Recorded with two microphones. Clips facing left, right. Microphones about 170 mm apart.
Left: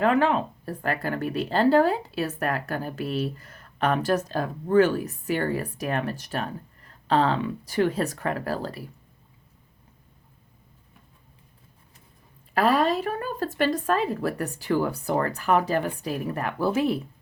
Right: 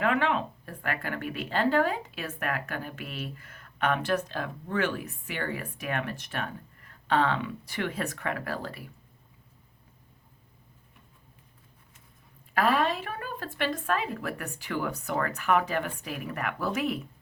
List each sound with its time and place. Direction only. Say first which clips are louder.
0.0 s speech: left 5 dB; 40° left (ahead or behind)
12.5 s speech: left 4 dB; 35° left (ahead or behind)